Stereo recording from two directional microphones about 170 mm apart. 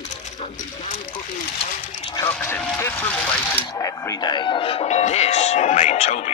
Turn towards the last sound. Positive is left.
turn(degrees=40)  # may be behind; listen again after turning